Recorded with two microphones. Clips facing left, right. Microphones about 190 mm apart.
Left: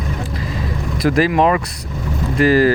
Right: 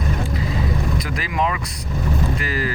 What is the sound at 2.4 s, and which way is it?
Speech, 40° left (ahead or behind).